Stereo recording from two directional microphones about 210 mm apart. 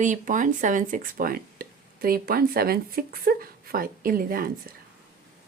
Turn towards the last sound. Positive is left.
turn(degrees=-45)  # may be behind; listen again after turning